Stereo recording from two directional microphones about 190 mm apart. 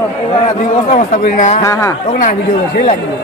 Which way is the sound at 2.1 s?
45° left (ahead or behind).